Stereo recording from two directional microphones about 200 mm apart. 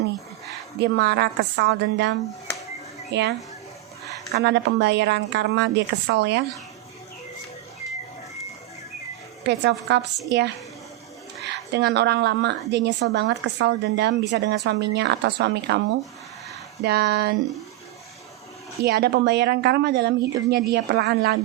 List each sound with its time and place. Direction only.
0.8 s a woman's voice: 55° right (ahead or behind)
4.3 s a woman's voice: 55° right (ahead or behind)
9.4 s a woman's voice: 55° right (ahead or behind)
11.4 s a woman's voice: 55° right (ahead or behind)
16.8 s a woman's voice: 55° right (ahead or behind)
18.8 s a woman's voice: 55° right (ahead or behind)